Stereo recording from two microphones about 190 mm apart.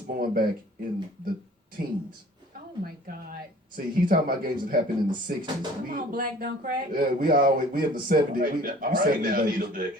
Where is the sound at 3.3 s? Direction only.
50° right (ahead or behind).